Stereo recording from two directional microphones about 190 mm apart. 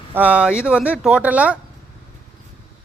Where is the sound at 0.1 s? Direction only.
10° right (ahead or behind).